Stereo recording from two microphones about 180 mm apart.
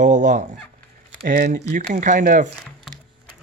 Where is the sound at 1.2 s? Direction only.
55° right (ahead or behind).